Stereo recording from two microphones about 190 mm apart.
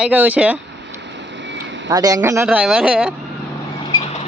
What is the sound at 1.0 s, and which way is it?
Vehicle, 70° right (ahead or behind).